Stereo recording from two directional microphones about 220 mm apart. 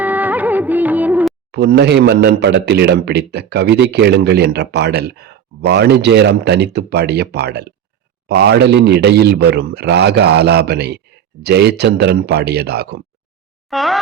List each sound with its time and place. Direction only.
0.0 s music: 5° right (ahead or behind)
1.5 s a man's voice: 50° right (ahead or behind)
13.7 s a sound: centre (ahead or behind)